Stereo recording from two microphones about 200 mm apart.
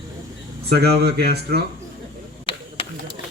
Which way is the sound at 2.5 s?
25° left (ahead or behind).